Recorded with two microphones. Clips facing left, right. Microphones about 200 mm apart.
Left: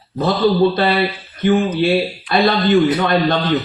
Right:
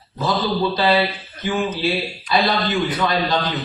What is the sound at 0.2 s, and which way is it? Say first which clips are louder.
A man's voice: left 7 dB; 55° left (ahead or behind).